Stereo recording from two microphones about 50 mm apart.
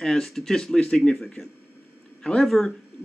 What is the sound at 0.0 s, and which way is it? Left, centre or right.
A man's voice, centre.